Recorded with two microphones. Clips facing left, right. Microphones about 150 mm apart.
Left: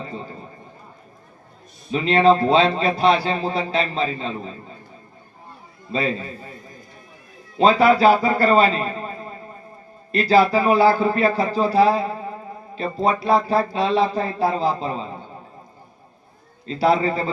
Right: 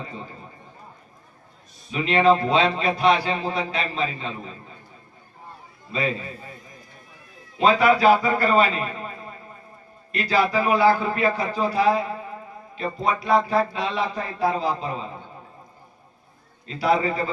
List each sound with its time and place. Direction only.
1.9 s a man's voice: 30° left (ahead or behind)
7.6 s a man's voice: 30° left (ahead or behind)
10.1 s a man's voice: 30° left (ahead or behind)
16.6 s a man's voice: 30° left (ahead or behind)